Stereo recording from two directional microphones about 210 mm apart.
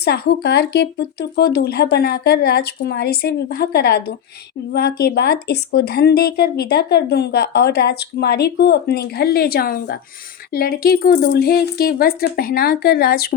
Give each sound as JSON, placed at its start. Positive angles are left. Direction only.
{"t": 0.0, "sound": "speech", "side_deg": 50}